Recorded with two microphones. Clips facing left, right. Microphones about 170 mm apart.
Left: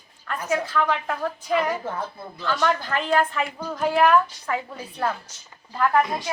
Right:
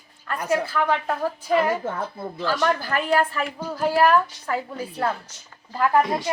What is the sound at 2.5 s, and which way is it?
A woman's voice, 5° right (ahead or behind).